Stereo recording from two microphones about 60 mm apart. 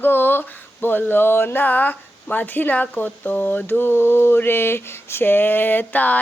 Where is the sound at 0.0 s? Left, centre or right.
Left.